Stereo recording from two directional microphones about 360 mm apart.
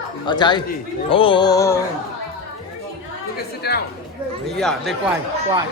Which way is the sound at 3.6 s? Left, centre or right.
Left.